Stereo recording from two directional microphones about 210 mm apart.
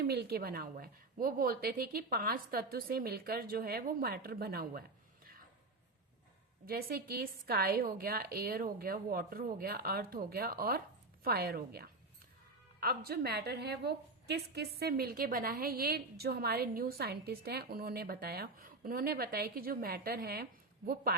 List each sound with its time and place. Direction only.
0.0 s a woman's voice: 50° right (ahead or behind)
5.2 s a sound: 45° right (ahead or behind)
6.7 s a woman's voice: 45° right (ahead or behind)